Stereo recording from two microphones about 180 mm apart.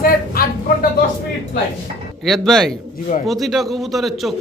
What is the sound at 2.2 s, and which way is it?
A man's voice, centre (ahead or behind).